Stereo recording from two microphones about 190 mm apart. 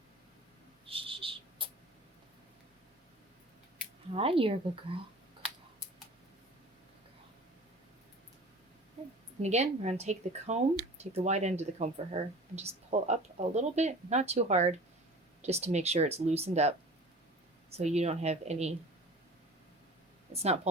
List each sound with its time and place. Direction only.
0.9 s a sound: 30° right (ahead or behind)
4.1 s speech: 30° right (ahead or behind)
9.4 s speech: 35° right (ahead or behind)
20.3 s speech: 35° right (ahead or behind)